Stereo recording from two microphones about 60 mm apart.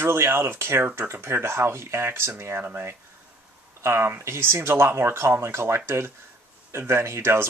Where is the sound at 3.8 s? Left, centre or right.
Right.